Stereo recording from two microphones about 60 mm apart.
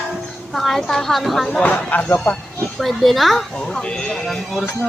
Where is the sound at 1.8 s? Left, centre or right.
Left.